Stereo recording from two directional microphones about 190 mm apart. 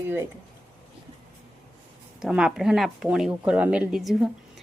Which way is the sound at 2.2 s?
5° right (ahead or behind).